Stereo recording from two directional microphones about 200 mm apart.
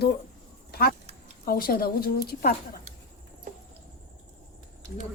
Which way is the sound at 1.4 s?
45° left (ahead or behind).